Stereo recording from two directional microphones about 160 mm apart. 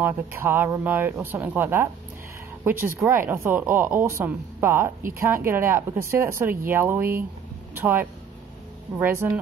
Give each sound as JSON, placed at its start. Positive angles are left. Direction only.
{"t": 0.0, "sound": "speech", "side_deg": -15}